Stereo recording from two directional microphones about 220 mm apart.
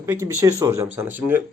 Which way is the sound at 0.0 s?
10° right (ahead or behind).